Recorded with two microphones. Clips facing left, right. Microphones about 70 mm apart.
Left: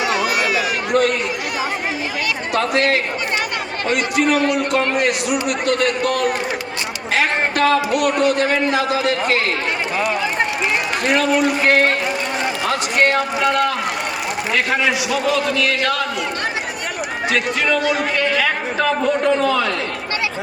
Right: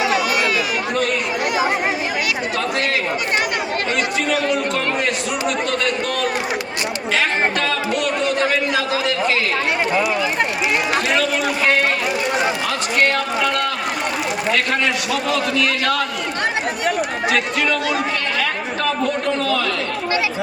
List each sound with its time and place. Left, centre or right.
2.6 s speech: left
4.7 s a man's voice: left
7.9 s a man's voice: left
8.4 s a man's voice: left
13.1 s speech: centre
14.5 s a man's voice: centre
17.3 s a man's voice: centre
19.0 s a man's voice: centre